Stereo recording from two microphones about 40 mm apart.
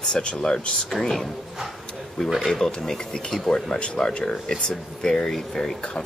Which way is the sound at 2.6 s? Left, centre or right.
Centre.